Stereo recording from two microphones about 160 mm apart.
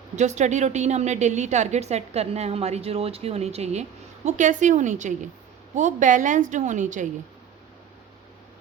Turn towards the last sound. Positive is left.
turn(degrees=-50)  # may be behind; listen again after turning